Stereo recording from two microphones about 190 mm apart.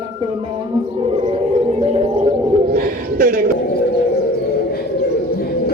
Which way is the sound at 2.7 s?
50° right (ahead or behind).